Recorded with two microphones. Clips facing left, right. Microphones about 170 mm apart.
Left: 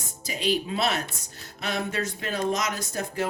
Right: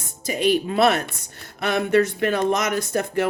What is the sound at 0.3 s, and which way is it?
Speech, 55° right (ahead or behind).